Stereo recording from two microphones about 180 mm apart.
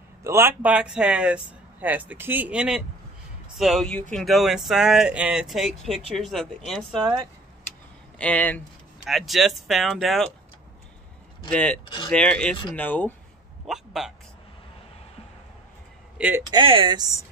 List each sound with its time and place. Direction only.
0.2 s speech: 15° right (ahead or behind); by 7.0 s centre (ahead or behind)
8.2 s speech: 5° left (ahead or behind)
11.4 s speech: 5° left (ahead or behind)
11.8 s speech: 25° left (ahead or behind)
12.1 s speech: 5° left (ahead or behind)
13.7 s speech: centre (ahead or behind)
16.2 s speech: 10° right (ahead or behind)
16.4 s speech: 25° right (ahead or behind)